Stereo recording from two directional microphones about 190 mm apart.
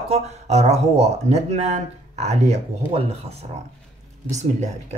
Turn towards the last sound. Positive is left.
turn(degrees=-40)  # may be behind; listen again after turning